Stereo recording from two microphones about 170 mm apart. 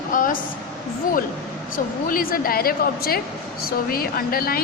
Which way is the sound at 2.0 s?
55° left (ahead or behind).